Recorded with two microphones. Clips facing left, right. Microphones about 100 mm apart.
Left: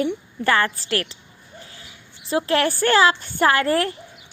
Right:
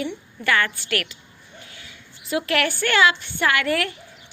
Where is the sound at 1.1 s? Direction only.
30° left (ahead or behind).